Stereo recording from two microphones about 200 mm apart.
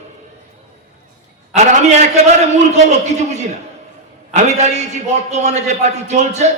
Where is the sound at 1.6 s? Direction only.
35° right (ahead or behind).